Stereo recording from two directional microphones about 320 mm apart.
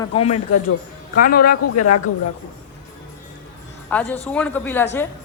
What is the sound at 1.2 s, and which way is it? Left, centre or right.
Speech, left.